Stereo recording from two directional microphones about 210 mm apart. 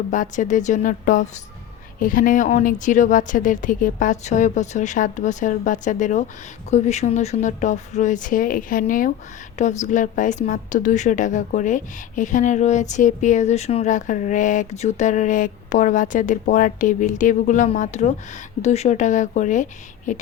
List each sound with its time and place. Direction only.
0.1 s a woman's voice: 35° left (ahead or behind)